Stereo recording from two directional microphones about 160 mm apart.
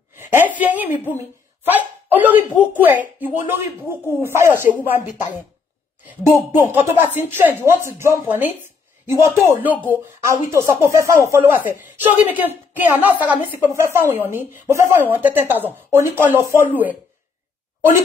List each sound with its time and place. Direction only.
0.1 s a sound: 15° right (ahead or behind)
0.6 s a woman's voice: 10° right (ahead or behind)
6.6 s a woman's voice: 15° right (ahead or behind)